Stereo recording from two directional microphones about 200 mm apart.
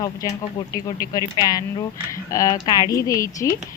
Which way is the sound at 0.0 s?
15° left (ahead or behind).